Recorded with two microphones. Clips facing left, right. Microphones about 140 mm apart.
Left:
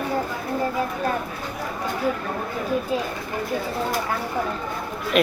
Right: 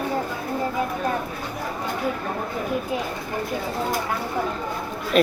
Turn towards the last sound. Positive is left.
turn(degrees=-40)  # may be behind; listen again after turning